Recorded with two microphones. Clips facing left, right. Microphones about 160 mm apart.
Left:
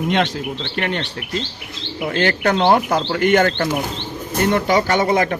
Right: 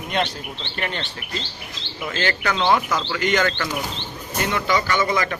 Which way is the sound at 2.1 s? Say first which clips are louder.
Left 6 dB; 60° left (ahead or behind).